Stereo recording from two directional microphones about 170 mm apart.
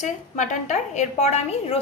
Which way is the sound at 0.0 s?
45° left (ahead or behind).